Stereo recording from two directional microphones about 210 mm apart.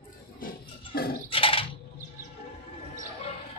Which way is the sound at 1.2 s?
25° left (ahead or behind).